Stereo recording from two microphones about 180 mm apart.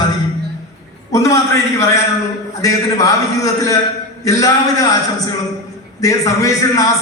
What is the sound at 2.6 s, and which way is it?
A man's voice, 20° left (ahead or behind).